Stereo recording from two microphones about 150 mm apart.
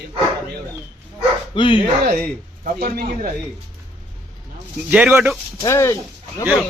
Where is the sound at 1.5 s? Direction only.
35° left (ahead or behind).